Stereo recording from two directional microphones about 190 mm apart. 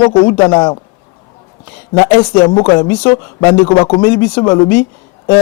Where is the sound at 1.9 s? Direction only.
15° left (ahead or behind).